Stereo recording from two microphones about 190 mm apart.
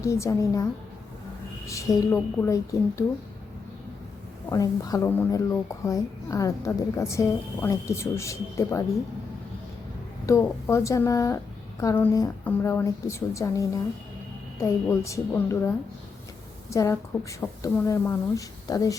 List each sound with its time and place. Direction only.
0.0 s a child's voice: 15° left (ahead or behind)
1.6 s a child's voice: 15° left (ahead or behind)
4.4 s a child's voice: 20° left (ahead or behind)
10.2 s a child's voice: 15° left (ahead or behind)